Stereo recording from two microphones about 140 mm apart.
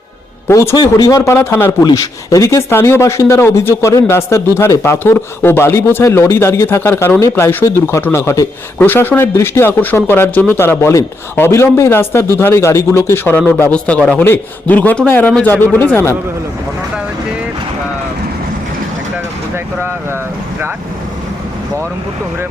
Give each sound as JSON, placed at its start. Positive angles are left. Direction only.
{"t": 0.4, "sound": "speech", "side_deg": 20}
{"t": 1.8, "sound": "speech", "side_deg": 25}